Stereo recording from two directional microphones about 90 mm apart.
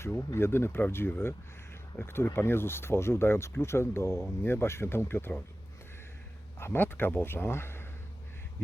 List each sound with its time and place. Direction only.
0.0 s speech: 25° left (ahead or behind)
6.6 s speech: 25° left (ahead or behind)